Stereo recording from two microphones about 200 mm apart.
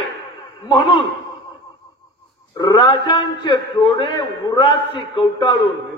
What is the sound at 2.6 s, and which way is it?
A man's voice, 20° left (ahead or behind).